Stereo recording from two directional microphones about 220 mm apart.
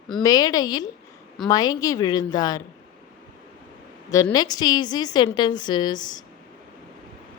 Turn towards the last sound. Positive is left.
turn(degrees=20)  # may be behind; listen again after turning